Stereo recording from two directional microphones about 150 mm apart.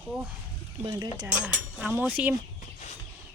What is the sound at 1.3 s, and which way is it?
Speech, 5° right (ahead or behind).